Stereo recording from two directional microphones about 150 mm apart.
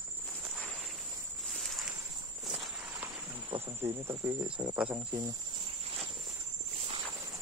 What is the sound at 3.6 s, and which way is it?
Cricket, 15° right (ahead or behind).